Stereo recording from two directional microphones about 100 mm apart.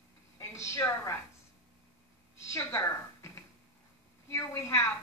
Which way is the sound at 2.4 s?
30° left (ahead or behind).